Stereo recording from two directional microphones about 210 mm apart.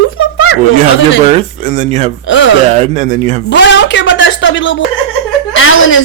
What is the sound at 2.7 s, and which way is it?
Speech, 35° right (ahead or behind).